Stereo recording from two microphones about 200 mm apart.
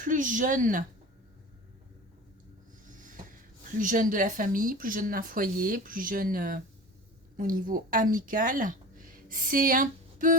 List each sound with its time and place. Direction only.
0.0 s a woman's voice: 40° right (ahead or behind)
2.8 s a sound: 40° right (ahead or behind)
3.8 s speech: 40° right (ahead or behind)